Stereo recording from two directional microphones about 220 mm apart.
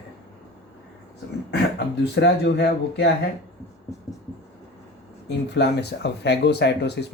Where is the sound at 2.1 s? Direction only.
50° left (ahead or behind).